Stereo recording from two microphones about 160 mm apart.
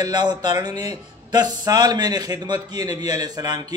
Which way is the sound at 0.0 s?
25° right (ahead or behind).